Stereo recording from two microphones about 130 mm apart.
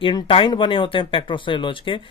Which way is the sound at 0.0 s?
40° left (ahead or behind).